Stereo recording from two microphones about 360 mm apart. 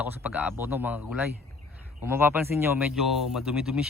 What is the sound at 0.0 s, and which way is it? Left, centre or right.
Speech, centre.